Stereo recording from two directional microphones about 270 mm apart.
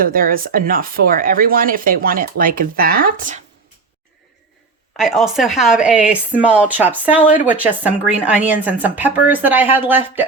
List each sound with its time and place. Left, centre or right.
0.0 s speech: right
4.9 s speech: centre